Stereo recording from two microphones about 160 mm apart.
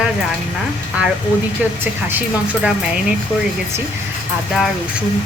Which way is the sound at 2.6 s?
5° right (ahead or behind).